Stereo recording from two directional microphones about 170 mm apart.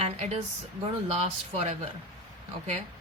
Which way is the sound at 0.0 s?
40° right (ahead or behind).